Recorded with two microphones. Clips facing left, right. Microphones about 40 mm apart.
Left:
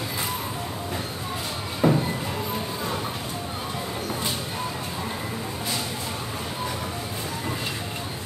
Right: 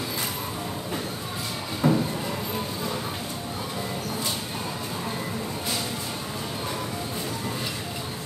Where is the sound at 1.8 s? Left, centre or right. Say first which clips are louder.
Left 2 dB; left.